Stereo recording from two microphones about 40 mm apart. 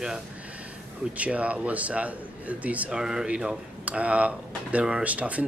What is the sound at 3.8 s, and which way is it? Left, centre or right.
Speech, right.